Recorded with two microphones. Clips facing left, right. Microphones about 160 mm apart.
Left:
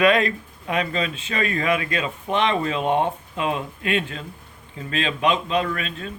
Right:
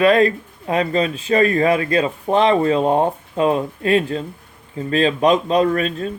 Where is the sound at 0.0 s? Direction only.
35° right (ahead or behind).